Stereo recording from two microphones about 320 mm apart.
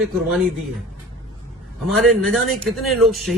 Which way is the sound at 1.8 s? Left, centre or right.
Centre.